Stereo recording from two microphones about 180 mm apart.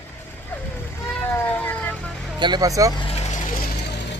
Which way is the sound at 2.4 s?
20° right (ahead or behind).